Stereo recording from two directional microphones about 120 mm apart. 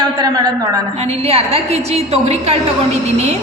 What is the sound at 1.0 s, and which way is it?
A woman's voice, 60° right (ahead or behind).